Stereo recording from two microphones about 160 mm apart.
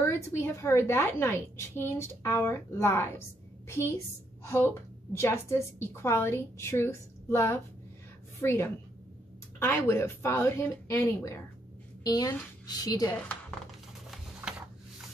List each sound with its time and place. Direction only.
0.0 s a woman's voice: 15° left (ahead or behind)
4.5 s a woman's voice: 15° left (ahead or behind)